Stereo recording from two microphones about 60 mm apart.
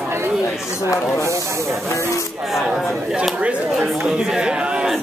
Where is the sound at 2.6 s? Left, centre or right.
Centre.